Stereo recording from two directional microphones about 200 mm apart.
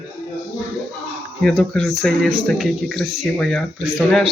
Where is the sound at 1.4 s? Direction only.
5° left (ahead or behind).